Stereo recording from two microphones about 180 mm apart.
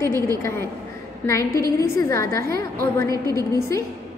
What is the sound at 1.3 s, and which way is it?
A woman's voice, 15° left (ahead or behind).